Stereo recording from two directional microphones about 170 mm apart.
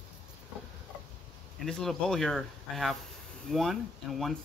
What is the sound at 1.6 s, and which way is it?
Speech, 5° left (ahead or behind).